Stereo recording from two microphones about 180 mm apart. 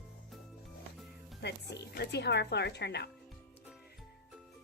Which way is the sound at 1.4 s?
65° left (ahead or behind).